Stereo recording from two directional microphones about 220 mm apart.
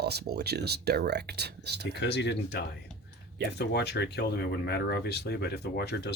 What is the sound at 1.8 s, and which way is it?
Speech, 50° left (ahead or behind).